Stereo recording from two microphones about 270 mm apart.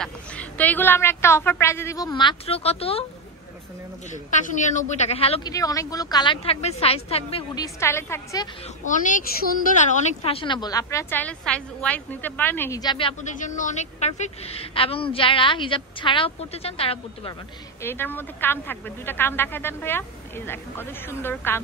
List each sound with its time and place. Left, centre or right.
0.0 s a woman's voice: centre; by 3.1 s left
4.3 s a woman's voice: left; by 8.5 s centre
10.2 s a woman's voice: centre
17.8 s a woman's voice: centre